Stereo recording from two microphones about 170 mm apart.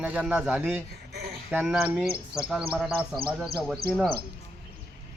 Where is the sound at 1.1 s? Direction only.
70° right (ahead or behind).